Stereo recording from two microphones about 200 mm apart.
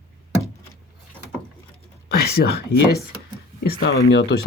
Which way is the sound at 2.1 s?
50° left (ahead or behind).